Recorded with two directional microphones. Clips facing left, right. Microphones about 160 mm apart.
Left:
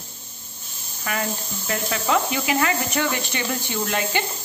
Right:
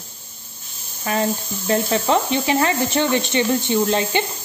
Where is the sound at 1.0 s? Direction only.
30° right (ahead or behind).